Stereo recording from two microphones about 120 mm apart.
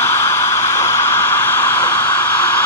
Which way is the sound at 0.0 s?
20° left (ahead or behind).